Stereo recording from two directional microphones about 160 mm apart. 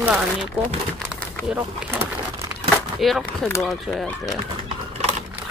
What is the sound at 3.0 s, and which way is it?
Speech, centre (ahead or behind).